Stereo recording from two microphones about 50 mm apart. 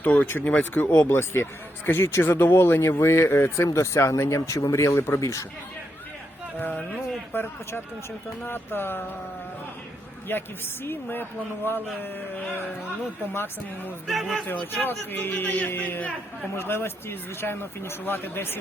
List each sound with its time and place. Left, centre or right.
0.0 s a man's voice: left
1.0 s speech: left
3.8 s speech: left
7.3 s speech: left
10.3 s speech: left
13.3 s speech: left
14.1 s a man's voice: centre
14.8 s a man's voice: left
16.6 s speech: left